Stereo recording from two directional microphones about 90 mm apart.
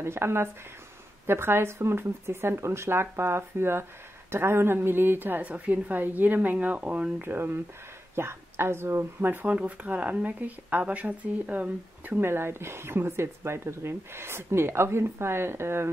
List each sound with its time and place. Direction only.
0.0 s speech: 30° right (ahead or behind)